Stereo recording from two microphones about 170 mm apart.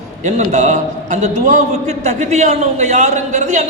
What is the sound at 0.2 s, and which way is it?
A man's voice, 45° right (ahead or behind).